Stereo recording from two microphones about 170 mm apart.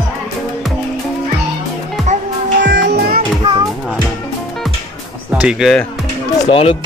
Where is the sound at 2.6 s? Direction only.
75° right (ahead or behind).